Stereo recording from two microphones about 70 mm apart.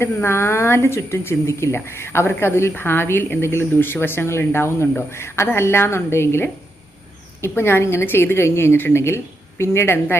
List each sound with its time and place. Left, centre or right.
0.0 s speech: left